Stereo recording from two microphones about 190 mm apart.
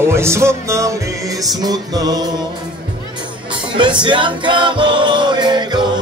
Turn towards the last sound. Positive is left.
turn(degrees=-20)  # may be behind; listen again after turning